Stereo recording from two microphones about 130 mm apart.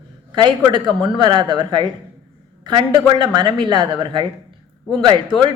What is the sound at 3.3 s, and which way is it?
Speech, 40° right (ahead or behind).